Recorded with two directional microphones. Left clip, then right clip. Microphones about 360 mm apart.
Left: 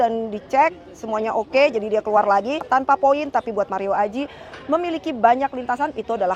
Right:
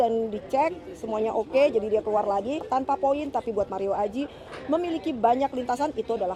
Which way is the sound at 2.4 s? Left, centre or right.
Left.